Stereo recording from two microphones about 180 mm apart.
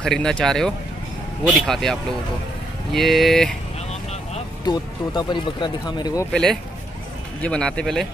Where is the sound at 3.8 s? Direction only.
35° left (ahead or behind).